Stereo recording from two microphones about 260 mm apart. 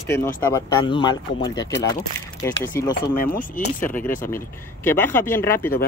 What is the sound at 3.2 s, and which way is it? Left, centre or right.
Speech, left.